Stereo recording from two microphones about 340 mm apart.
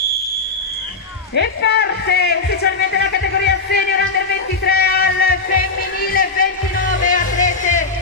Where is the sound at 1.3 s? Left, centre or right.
Left.